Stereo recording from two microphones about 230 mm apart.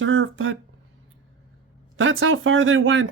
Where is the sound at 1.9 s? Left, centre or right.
Right.